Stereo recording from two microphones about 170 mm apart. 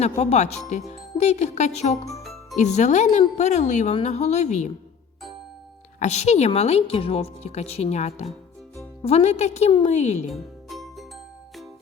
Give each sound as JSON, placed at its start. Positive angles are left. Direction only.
{"t": 0.0, "sound": "a woman's voice", "side_deg": 40}
{"t": 6.0, "sound": "a woman's voice", "side_deg": 40}
{"t": 10.3, "sound": "music", "side_deg": 0}